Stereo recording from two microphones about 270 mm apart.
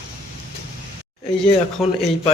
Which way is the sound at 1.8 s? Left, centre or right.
Centre.